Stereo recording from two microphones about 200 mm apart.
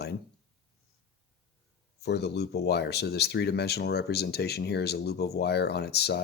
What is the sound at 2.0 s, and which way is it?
Speech, 55° left (ahead or behind).